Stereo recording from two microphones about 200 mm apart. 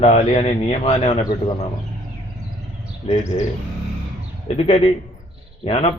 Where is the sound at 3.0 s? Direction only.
35° left (ahead or behind).